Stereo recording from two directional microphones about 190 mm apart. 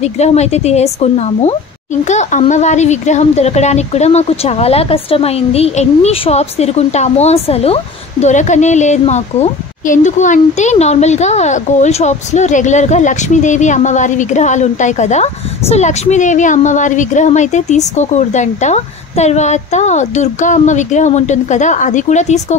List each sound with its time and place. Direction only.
0.0 s speech: 35° left (ahead or behind)